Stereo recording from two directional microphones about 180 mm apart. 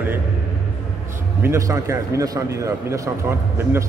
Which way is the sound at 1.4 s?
15° right (ahead or behind).